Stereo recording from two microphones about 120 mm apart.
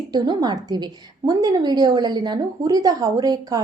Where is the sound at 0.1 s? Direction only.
35° right (ahead or behind).